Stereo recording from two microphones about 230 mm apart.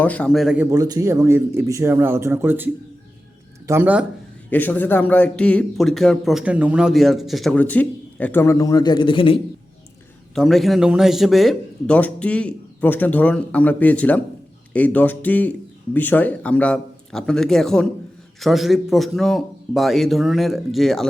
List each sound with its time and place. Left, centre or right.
0.0 s speech: centre
3.7 s speech: centre
4.4 s a man's voice: centre
10.3 s a man's voice: centre